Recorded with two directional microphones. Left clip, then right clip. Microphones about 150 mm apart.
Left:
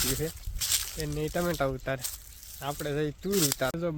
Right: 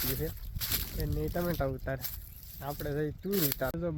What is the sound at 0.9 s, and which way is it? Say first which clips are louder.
Speech: left 4 dB; 20° left (ahead or behind).